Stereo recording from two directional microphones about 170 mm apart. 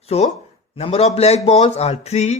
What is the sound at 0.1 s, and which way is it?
Speech, 35° left (ahead or behind).